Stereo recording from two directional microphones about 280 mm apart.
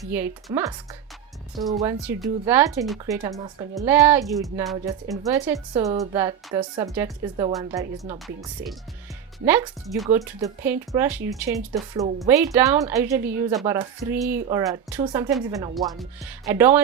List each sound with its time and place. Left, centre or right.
0.1 s speech: centre
1.7 s speech: centre
4.9 s speech: centre